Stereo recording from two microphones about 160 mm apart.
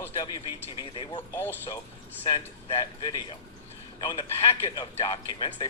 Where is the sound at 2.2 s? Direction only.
30° left (ahead or behind).